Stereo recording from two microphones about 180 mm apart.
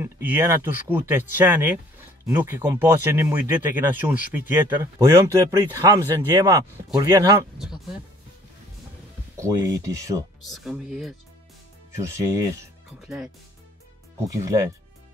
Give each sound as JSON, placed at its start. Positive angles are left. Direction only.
{"t": 0.0, "sound": "speech", "side_deg": -10}
{"t": 7.5, "sound": "speech", "side_deg": 0}
{"t": 9.4, "sound": "speech", "side_deg": -15}
{"t": 10.4, "sound": "speech", "side_deg": 0}
{"t": 12.0, "sound": "speech", "side_deg": -15}
{"t": 13.0, "sound": "speech", "side_deg": -5}
{"t": 14.2, "sound": "speech", "side_deg": -20}